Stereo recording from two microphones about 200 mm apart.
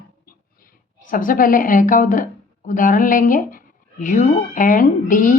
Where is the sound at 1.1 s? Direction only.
45° left (ahead or behind).